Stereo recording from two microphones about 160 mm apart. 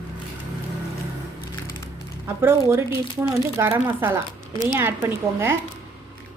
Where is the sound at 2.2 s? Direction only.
15° right (ahead or behind).